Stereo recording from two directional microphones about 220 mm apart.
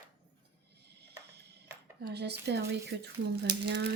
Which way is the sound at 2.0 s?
50° right (ahead or behind).